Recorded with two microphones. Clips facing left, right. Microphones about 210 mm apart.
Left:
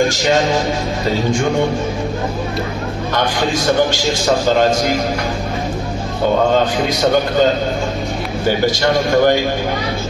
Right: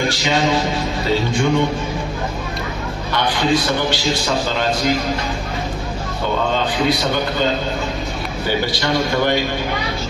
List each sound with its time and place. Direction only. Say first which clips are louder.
3.5 s a man's voice: left 3 dB; 45° left (ahead or behind)
8.6 s a man's voice: left 5 dB; 45° left (ahead or behind)